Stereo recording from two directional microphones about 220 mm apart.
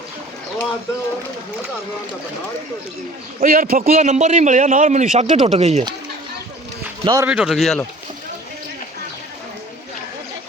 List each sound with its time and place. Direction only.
3.4 s a man's voice: 40° right (ahead or behind)
7.0 s speech: 15° right (ahead or behind)
7.3 s speech: 5° right (ahead or behind)